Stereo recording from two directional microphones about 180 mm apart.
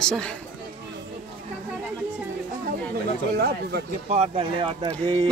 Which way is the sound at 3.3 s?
60° right (ahead or behind).